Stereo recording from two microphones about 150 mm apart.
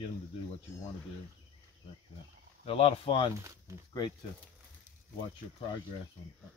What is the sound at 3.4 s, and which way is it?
Speech, 20° right (ahead or behind).